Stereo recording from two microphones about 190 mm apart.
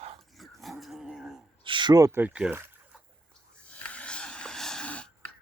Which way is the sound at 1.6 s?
25° right (ahead or behind).